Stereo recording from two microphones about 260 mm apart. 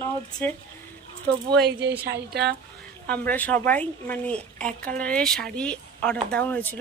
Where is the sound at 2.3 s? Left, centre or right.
Right.